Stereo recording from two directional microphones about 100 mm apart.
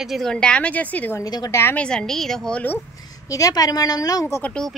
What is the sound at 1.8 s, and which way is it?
A woman's voice, 10° left (ahead or behind).